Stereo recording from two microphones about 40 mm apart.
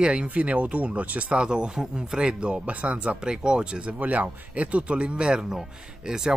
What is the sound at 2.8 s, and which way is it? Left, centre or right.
Speech, right.